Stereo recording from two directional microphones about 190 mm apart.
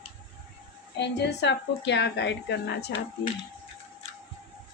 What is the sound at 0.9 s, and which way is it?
A woman's voice, 65° left (ahead or behind).